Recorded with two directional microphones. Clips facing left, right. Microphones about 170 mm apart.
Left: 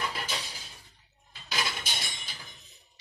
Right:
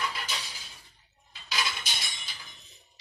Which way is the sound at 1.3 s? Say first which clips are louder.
Even; 45° left (ahead or behind).